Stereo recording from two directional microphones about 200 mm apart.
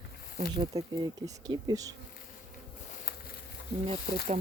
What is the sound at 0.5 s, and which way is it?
Speech, 20° right (ahead or behind).